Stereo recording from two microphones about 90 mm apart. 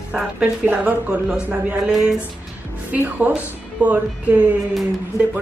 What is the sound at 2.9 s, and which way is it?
A woman's voice, 20° right (ahead or behind).